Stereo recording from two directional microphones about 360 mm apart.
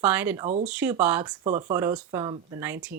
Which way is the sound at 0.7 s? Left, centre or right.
Centre.